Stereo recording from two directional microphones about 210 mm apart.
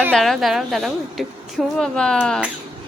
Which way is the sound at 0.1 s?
Centre (ahead or behind).